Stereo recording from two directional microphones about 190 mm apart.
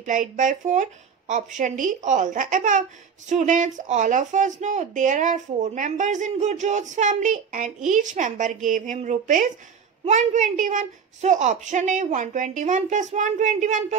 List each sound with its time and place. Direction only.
0.0 s speech: 45° right (ahead or behind)